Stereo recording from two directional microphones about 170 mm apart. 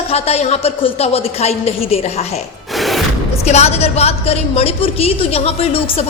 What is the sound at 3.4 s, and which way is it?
A woman's voice, 40° left (ahead or behind).